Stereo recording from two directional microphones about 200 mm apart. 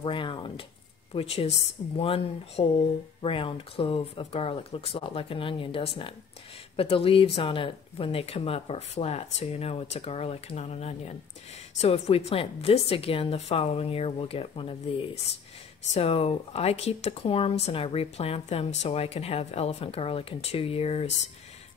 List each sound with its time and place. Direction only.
0.0 s speech: 25° left (ahead or behind)
15.9 s speech: 30° left (ahead or behind)